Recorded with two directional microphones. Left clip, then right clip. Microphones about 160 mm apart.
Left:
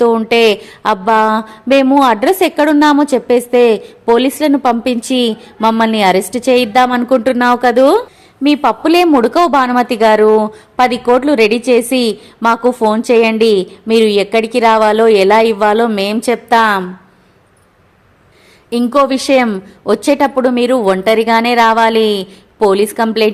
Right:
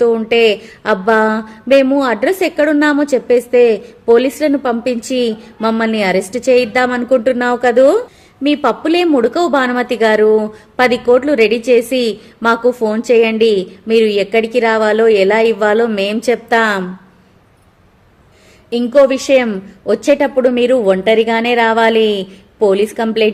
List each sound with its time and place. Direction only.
0.0 s a woman's voice: 25° left (ahead or behind)
18.7 s a woman's voice: 25° left (ahead or behind)